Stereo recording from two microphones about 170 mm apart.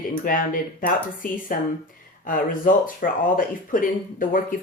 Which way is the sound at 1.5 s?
55° left (ahead or behind).